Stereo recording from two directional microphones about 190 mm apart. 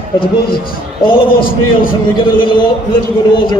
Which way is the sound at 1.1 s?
25° left (ahead or behind).